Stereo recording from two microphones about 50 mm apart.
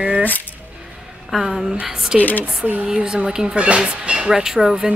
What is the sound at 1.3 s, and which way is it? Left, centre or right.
Speech, centre.